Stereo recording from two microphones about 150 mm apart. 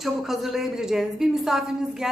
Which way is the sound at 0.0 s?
Centre (ahead or behind).